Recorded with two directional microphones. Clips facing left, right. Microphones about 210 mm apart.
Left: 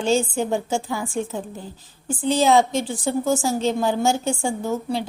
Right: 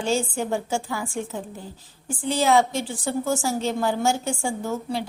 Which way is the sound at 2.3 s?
20° left (ahead or behind).